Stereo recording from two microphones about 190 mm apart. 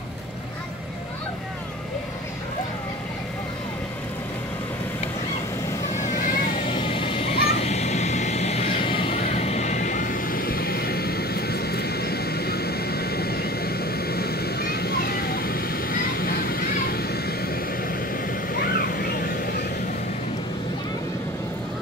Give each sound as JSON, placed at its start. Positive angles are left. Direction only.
{"t": 6.1, "sound": "vehicle", "side_deg": 45}
{"t": 6.7, "sound": "vehicle", "side_deg": 25}